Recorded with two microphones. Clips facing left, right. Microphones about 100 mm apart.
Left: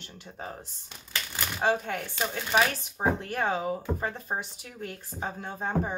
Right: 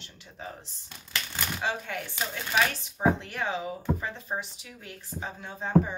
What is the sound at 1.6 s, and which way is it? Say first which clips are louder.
Speech: left 7 dB; 50° left (ahead or behind).